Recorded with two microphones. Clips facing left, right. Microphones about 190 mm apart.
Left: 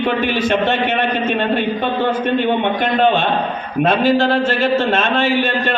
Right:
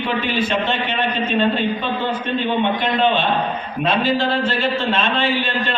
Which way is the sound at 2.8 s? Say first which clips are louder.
Left 3 dB; 50° left (ahead or behind).